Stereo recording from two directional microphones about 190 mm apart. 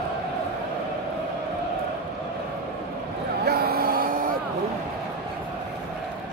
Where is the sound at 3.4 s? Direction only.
55° right (ahead or behind).